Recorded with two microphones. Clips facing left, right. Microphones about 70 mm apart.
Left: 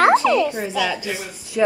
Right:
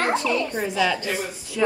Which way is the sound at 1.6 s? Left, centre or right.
Centre.